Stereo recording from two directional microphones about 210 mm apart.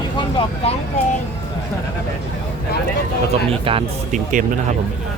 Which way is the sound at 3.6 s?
25° right (ahead or behind).